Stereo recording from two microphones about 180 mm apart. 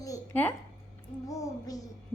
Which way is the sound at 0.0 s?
15° left (ahead or behind).